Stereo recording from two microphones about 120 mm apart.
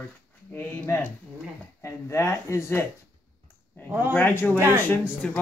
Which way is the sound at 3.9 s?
15° right (ahead or behind).